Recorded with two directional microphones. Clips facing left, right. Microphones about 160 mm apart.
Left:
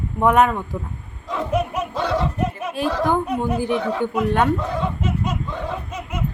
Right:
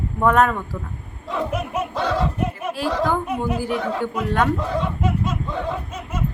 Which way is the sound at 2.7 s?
20° left (ahead or behind).